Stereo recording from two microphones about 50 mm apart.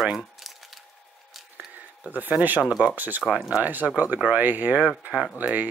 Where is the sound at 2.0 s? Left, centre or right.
Right.